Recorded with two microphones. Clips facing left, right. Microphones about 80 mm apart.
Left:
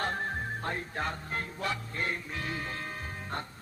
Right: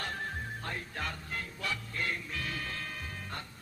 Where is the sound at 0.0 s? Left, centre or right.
Left.